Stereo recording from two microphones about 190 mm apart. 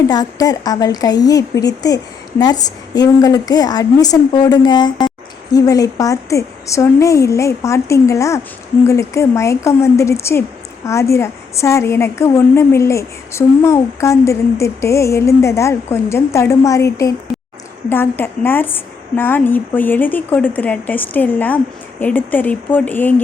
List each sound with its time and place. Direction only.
0.1 s a woman's voice: 20° left (ahead or behind)